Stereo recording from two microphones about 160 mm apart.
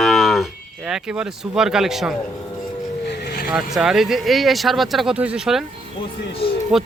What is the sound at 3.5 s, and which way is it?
Cattle, 5° right (ahead or behind).